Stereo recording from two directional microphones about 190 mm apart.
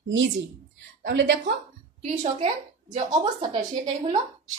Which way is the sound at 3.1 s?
25° right (ahead or behind).